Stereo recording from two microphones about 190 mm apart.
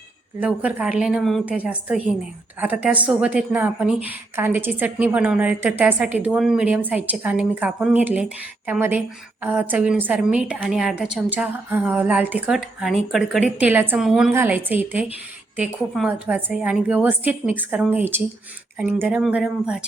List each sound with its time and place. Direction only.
0.3 s a woman's voice: 10° right (ahead or behind)